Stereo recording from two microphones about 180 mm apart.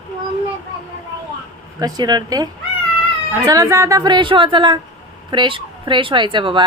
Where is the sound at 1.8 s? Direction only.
20° right (ahead or behind).